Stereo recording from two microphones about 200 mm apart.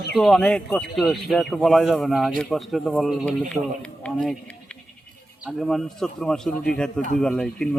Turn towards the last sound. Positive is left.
turn(degrees=5)  # may be behind; listen again after turning